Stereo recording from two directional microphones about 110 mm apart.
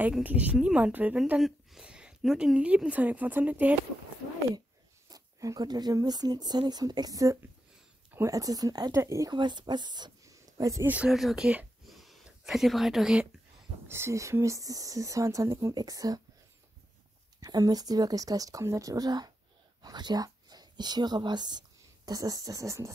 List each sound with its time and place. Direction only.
0.2 s a woman's voice: 15° right (ahead or behind)
5.1 s speech: 35° right (ahead or behind)
9.3 s speech: 45° right (ahead or behind)
11.1 s speech: centre (ahead or behind)
13.8 s speech: 25° right (ahead or behind)
17.4 s speech: 35° right (ahead or behind)